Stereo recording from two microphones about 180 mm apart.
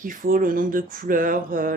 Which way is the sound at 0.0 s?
50° right (ahead or behind).